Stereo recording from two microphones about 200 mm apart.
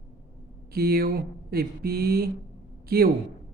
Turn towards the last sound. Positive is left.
turn(degrees=-50)  # may be behind; listen again after turning